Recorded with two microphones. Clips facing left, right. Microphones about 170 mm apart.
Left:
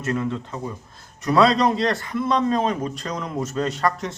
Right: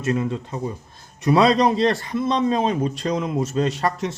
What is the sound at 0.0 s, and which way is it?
A man's voice, 15° right (ahead or behind).